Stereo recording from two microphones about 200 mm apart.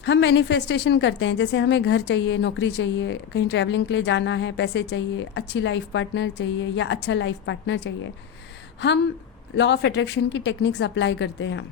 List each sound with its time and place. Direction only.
0.0 s a woman's voice: 60° left (ahead or behind)
9.6 s a woman's voice: 60° left (ahead or behind)